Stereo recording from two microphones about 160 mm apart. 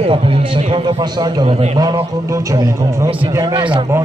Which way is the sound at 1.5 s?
45° right (ahead or behind).